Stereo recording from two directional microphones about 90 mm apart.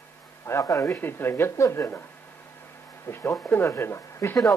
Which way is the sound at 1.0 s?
25° left (ahead or behind).